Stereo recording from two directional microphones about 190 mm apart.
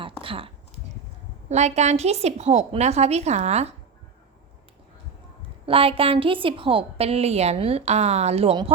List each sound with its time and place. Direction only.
0.0 s a sound: 30° right (ahead or behind)
1.5 s a woman's voice: 35° right (ahead or behind)
5.6 s a woman's voice: 30° right (ahead or behind)